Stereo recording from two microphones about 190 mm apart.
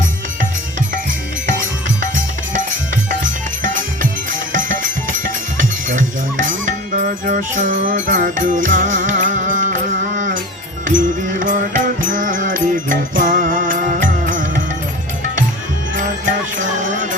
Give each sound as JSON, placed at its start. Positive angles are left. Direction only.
{"t": 4.5, "sound": "music", "side_deg": -45}